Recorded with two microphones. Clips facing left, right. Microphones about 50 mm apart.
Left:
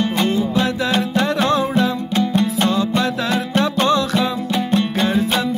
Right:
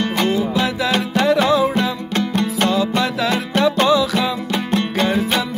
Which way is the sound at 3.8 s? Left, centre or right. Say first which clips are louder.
Right 1 dB; right.